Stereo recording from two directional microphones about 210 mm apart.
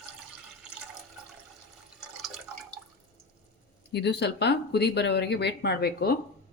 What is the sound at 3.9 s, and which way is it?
Speech, 55° left (ahead or behind).